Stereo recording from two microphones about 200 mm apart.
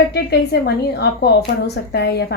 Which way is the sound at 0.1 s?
55° left (ahead or behind).